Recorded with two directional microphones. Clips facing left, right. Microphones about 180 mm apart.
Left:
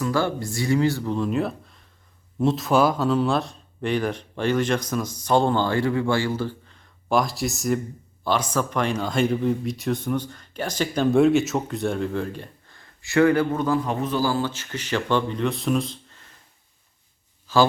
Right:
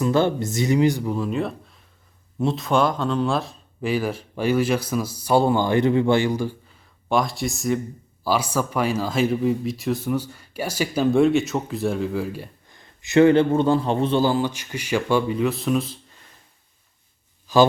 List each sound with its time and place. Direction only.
0.0 s speech: 20° right (ahead or behind)
1.1 s speech: centre (ahead or behind)
17.5 s speech: 15° right (ahead or behind)